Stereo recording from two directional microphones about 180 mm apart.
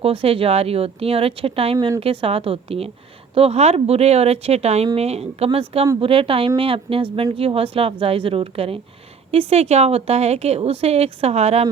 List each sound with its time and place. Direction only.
0.0 s speech: 30° right (ahead or behind)